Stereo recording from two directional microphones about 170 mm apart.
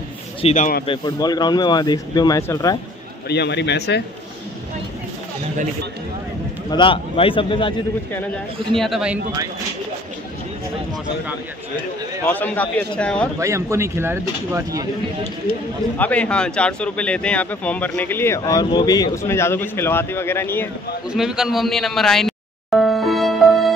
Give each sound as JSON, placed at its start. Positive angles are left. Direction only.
{"t": 0.4, "sound": "a man's voice", "side_deg": 40}
{"t": 0.8, "sound": "speech", "side_deg": 25}
{"t": 3.3, "sound": "a man's voice", "side_deg": 85}
{"t": 6.7, "sound": "a man's voice", "side_deg": 30}
{"t": 8.7, "sound": "a man's voice", "side_deg": 0}
{"t": 12.3, "sound": "speech", "side_deg": 10}
{"t": 13.4, "sound": "speech", "side_deg": -20}
{"t": 16.0, "sound": "speech", "side_deg": 10}
{"t": 21.1, "sound": "a sound", "side_deg": -5}